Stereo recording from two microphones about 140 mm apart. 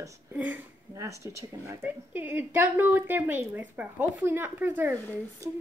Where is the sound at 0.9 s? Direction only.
20° right (ahead or behind).